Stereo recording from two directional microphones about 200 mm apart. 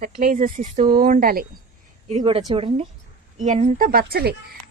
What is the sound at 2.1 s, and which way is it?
A woman's voice, 25° right (ahead or behind).